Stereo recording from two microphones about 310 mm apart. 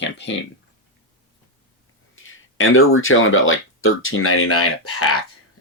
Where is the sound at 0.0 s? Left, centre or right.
Left.